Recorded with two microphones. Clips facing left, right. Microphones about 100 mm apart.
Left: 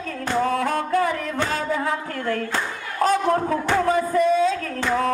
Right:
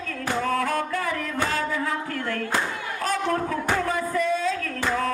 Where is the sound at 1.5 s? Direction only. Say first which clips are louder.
Left 2 dB; 30° left (ahead or behind).